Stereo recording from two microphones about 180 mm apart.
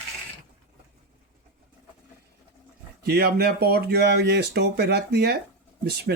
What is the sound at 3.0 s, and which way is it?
Speech, 60° right (ahead or behind).